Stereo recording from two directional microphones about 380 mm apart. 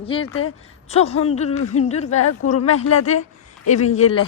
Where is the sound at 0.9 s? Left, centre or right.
Centre.